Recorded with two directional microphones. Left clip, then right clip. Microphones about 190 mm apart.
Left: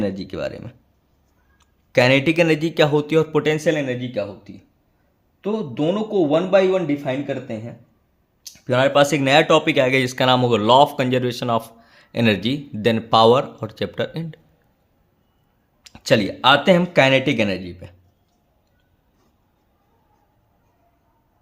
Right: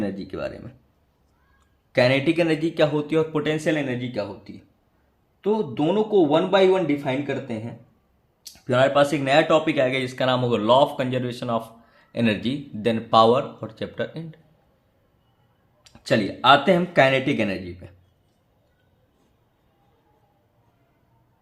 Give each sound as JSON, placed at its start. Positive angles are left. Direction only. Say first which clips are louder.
{"t": 0.0, "sound": "a man's voice", "louder": "left 4 dB", "side_deg": 40}
{"t": 8.4, "sound": "speech", "louder": "left 1 dB", "side_deg": 35}
{"t": 15.8, "sound": "speech", "louder": "left 5 dB", "side_deg": 50}